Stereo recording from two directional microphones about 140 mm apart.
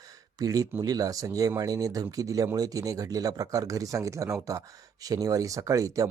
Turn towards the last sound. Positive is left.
turn(degrees=-25)  # may be behind; listen again after turning